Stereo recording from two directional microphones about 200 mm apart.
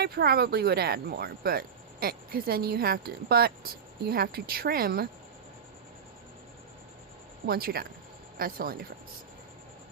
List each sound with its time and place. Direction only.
0.0 s speech: 50° right (ahead or behind)
7.4 s speech: 50° right (ahead or behind)